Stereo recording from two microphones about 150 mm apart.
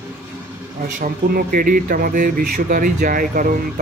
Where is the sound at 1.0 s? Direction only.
65° right (ahead or behind).